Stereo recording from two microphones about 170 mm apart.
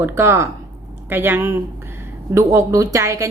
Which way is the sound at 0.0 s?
15° right (ahead or behind).